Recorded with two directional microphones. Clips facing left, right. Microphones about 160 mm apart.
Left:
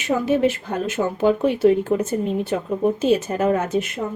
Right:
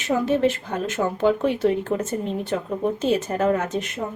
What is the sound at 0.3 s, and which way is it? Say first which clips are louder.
Speech: left 2 dB; 10° left (ahead or behind).